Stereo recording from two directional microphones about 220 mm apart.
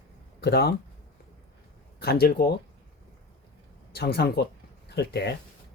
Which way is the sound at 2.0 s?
45° left (ahead or behind).